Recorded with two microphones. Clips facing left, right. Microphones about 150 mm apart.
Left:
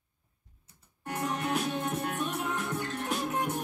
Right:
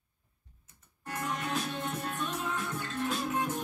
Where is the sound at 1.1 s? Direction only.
15° left (ahead or behind).